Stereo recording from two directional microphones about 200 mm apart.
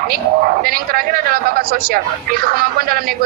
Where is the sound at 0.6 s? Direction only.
50° right (ahead or behind).